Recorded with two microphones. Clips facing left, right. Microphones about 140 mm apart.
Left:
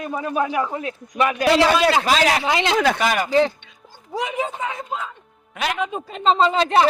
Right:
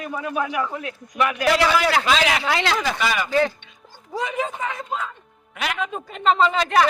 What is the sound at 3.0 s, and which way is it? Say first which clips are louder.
Speech: left 3 dB; 45° left (ahead or behind).